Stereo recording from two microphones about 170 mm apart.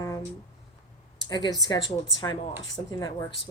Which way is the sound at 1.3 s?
25° left (ahead or behind).